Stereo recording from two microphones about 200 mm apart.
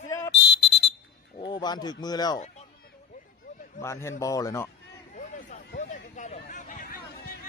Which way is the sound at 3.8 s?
15° left (ahead or behind).